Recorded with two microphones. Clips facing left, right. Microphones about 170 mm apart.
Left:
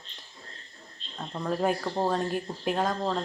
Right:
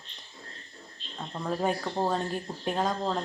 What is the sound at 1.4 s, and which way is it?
Speech, centre (ahead or behind).